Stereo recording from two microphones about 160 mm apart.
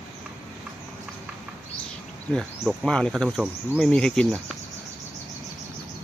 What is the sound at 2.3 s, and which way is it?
Insect, centre (ahead or behind).